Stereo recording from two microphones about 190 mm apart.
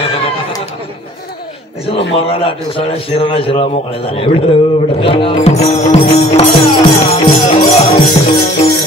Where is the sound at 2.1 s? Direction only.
30° left (ahead or behind).